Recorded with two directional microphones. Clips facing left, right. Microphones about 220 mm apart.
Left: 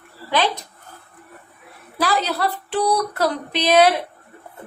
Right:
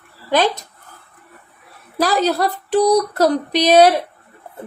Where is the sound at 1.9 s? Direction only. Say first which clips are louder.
Right 5 dB; 40° right (ahead or behind).